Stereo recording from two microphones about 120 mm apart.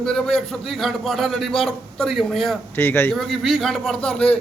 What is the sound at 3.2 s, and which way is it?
A man's voice, centre (ahead or behind).